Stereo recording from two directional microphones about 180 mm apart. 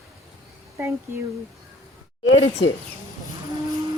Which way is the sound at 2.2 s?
90° left.